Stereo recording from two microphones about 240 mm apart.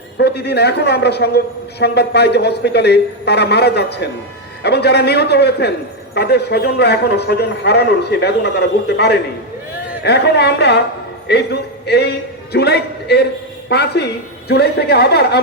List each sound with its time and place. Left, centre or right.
0.2 s a man's voice: left